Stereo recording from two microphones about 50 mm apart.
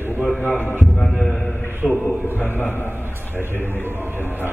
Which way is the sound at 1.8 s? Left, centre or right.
Left.